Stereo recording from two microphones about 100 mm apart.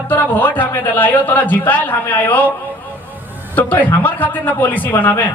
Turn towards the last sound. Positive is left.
turn(degrees=20)  # may be behind; listen again after turning